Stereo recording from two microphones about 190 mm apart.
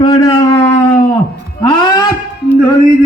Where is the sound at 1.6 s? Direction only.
25° left (ahead or behind).